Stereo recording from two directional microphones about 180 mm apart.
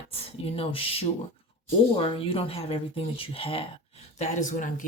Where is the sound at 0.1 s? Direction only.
35° left (ahead or behind).